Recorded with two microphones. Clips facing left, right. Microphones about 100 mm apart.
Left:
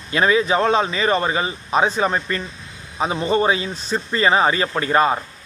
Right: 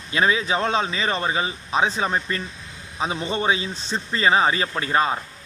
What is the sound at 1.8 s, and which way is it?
Speech, centre (ahead or behind).